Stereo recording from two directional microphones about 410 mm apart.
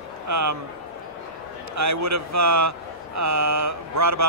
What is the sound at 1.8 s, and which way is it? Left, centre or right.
Speech, right.